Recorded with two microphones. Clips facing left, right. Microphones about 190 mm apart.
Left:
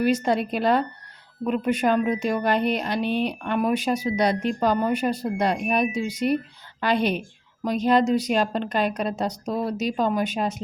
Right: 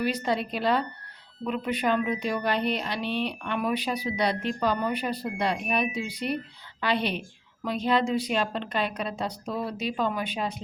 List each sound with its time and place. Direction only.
0.0 s speech: 45° left (ahead or behind)